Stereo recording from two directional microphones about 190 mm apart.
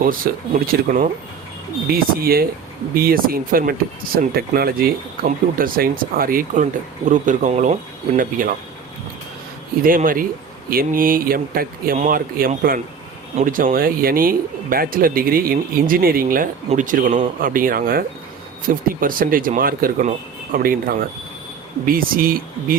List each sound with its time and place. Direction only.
0.0 s speech: 50° right (ahead or behind)
9.8 s speech: 45° right (ahead or behind)